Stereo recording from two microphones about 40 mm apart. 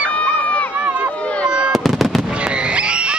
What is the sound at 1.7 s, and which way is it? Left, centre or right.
Fireworks, centre.